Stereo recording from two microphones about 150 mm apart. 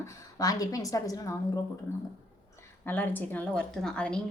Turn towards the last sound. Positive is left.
turn(degrees=5)  # may be behind; listen again after turning